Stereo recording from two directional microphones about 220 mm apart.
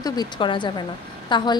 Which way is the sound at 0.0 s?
20° left (ahead or behind).